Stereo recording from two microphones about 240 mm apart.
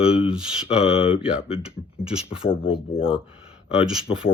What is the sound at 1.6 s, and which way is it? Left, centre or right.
Speech, centre.